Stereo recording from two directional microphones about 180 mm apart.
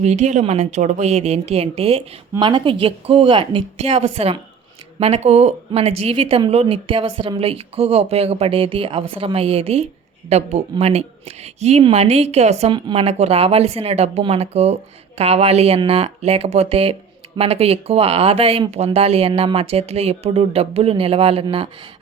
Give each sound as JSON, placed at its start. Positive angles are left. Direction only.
{"t": 0.0, "sound": "speech", "side_deg": -40}